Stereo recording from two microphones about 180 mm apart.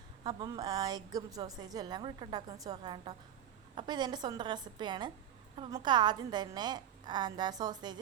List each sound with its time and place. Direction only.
0.3 s a woman's voice: 25° right (ahead or behind)